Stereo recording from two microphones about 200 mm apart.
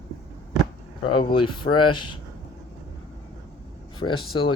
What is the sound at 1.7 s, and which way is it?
Speech, 55° left (ahead or behind).